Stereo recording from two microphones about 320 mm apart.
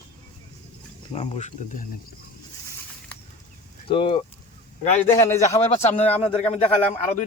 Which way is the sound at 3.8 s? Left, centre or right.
Centre.